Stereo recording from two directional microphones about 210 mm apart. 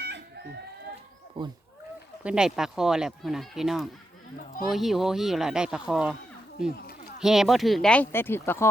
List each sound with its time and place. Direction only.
1.4 s speech: 25° right (ahead or behind)
2.2 s speech: 5° right (ahead or behind); by 8.7 s 10° left (ahead or behind)